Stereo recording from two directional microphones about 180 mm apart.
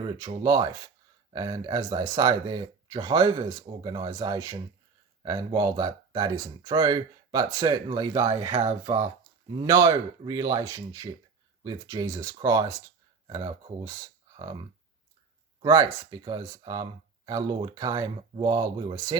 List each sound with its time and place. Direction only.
0.0 s speech: 25° right (ahead or behind)